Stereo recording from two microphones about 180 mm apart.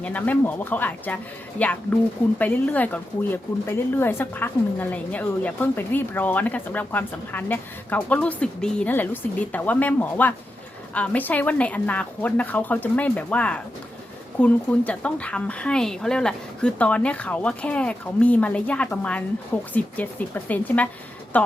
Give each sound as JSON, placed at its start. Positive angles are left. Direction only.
{"t": 0.0, "sound": "speech", "side_deg": 10}